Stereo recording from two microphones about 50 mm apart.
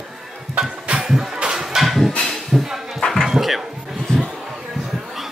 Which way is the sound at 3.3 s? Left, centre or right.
Centre.